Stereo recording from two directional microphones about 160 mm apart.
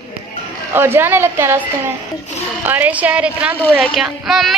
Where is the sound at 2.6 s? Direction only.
10° right (ahead or behind).